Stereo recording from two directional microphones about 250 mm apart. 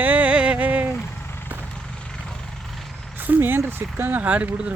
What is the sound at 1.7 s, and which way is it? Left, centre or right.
Vehicle, centre.